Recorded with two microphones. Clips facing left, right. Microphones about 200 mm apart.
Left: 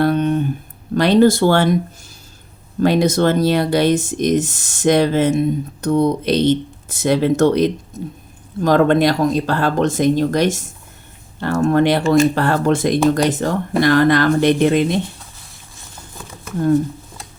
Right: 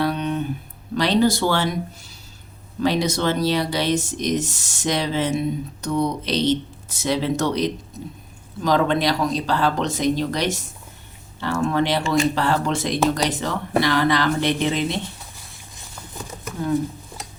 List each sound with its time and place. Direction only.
0.0 s a sound: 50° left (ahead or behind)
0.9 s speech: 55° left (ahead or behind)
2.8 s speech: 50° left (ahead or behind)